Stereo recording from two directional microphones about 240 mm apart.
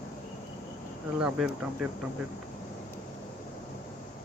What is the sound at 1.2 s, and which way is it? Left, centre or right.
Speech, centre.